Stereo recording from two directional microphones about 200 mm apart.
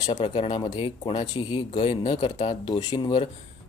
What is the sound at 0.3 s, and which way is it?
Speech, 25° left (ahead or behind).